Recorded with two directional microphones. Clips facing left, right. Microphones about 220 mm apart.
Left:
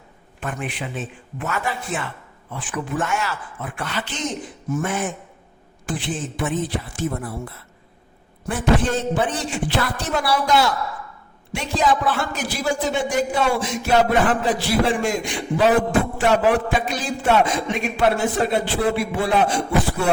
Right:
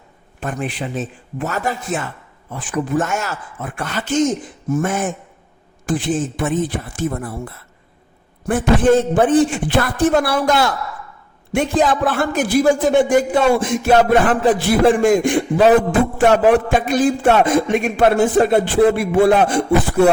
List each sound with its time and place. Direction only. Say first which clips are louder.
0.3 s a man's voice: right 5 dB; 35° right (ahead or behind)